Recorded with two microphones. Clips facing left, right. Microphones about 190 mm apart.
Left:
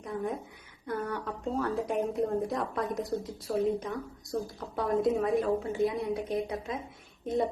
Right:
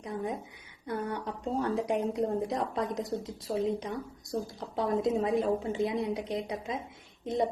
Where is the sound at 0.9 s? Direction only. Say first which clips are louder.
Even; 20° right (ahead or behind).